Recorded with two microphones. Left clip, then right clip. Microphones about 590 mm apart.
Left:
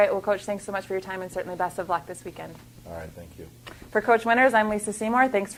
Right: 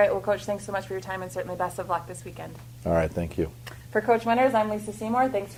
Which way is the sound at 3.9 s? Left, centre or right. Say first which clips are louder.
Left 2 dB; left.